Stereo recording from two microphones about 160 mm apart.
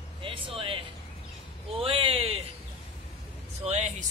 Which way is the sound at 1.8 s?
35° right (ahead or behind).